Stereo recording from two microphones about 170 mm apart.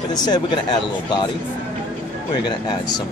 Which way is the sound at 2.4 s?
25° left (ahead or behind).